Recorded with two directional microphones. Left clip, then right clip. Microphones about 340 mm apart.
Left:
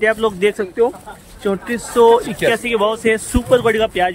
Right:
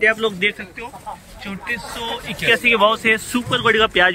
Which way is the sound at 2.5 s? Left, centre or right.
Centre.